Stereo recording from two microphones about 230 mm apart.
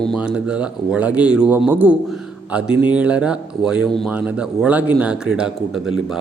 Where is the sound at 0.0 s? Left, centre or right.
Centre.